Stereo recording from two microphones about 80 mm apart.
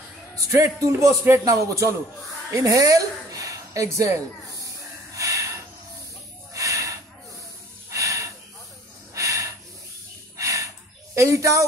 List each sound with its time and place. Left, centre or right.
0.4 s a woman's voice: right
5.1 s snort: right
10.3 s a sound: right
11.1 s speech: right